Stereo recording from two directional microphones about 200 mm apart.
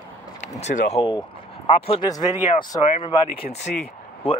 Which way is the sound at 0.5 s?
35° left (ahead or behind).